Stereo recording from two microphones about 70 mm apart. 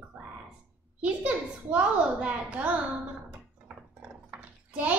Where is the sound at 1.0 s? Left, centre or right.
Centre.